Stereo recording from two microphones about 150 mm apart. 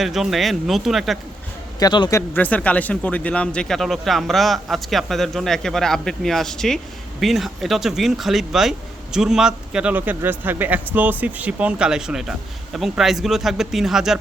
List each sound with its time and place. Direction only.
0.0 s a man's voice: centre (ahead or behind)
1.8 s a man's voice: 25° left (ahead or behind)
2.3 s a man's voice: 10° left (ahead or behind)